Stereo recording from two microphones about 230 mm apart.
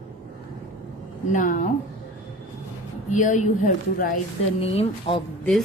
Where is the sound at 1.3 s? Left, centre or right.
Left.